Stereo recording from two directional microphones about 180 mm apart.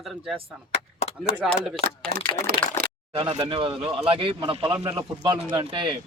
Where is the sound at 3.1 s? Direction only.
30° right (ahead or behind).